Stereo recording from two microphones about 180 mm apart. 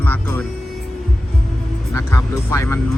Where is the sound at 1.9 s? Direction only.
15° left (ahead or behind).